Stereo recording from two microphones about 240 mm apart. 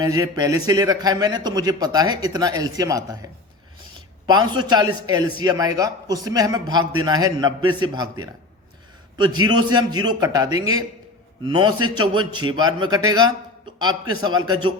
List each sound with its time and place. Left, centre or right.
0.0 s a man's voice: centre
4.3 s a man's voice: centre